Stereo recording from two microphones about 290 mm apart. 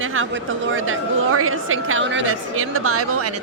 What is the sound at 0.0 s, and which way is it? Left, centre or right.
A woman's voice, right.